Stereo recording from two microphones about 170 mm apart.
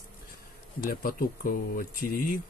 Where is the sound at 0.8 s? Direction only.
55° left (ahead or behind).